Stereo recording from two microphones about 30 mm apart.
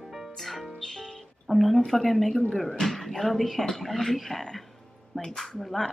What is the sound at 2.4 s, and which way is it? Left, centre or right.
Speech, left.